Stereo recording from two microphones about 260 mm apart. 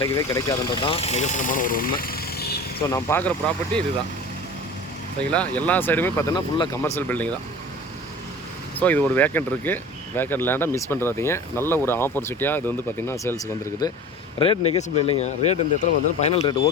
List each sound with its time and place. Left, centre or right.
0.0 s speech: centre; by 2.6 s left
2.8 s speech: centre
5.3 s speech: centre
8.8 s speech: centre; by 16.6 s left